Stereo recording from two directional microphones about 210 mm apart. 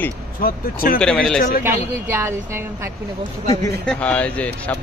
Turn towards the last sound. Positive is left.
turn(degrees=5)  # may be behind; listen again after turning